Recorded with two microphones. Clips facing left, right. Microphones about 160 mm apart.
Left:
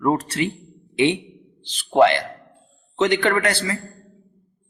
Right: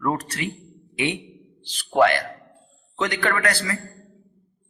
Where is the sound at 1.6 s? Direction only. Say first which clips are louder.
Left 3 dB; 20° left (ahead or behind).